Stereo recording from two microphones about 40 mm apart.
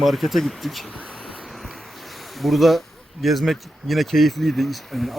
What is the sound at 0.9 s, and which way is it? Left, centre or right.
Speech, left.